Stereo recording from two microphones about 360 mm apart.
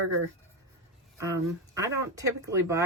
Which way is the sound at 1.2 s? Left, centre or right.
Centre.